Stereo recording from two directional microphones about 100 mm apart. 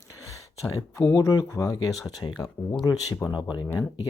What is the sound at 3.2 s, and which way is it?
Speech, 20° left (ahead or behind).